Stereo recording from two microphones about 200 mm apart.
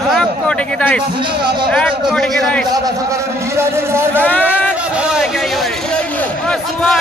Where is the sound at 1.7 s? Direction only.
5° left (ahead or behind).